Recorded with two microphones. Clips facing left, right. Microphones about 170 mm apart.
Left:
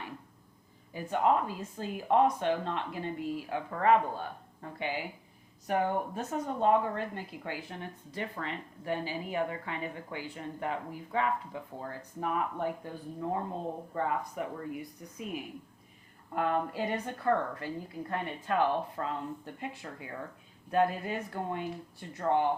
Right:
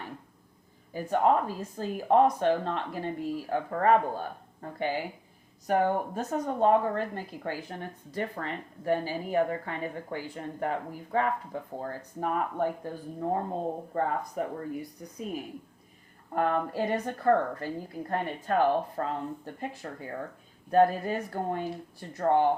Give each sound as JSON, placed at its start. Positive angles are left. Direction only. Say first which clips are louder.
{"t": 0.9, "sound": "a woman's voice", "louder": "right 3 dB", "side_deg": -40}